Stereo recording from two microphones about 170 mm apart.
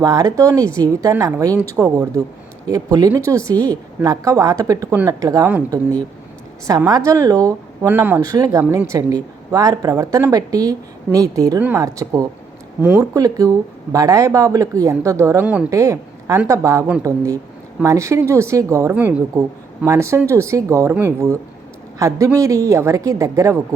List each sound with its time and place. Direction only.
0.0 s a woman's voice: 20° right (ahead or behind)
6.7 s a woman's voice: 20° right (ahead or behind)
7.9 s speech: 10° right (ahead or behind)
8.2 s a woman's voice: 20° right (ahead or behind)